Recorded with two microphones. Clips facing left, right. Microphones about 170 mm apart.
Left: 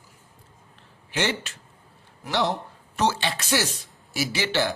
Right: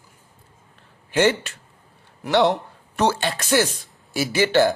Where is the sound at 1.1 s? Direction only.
55° right (ahead or behind).